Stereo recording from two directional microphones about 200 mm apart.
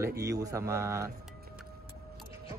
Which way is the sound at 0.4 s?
15° right (ahead or behind).